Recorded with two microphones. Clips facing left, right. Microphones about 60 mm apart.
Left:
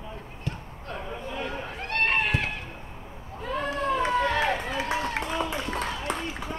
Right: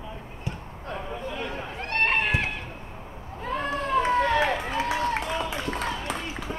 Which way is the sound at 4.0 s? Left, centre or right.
Right.